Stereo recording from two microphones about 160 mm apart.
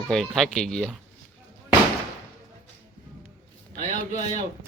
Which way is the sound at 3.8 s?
45° left (ahead or behind).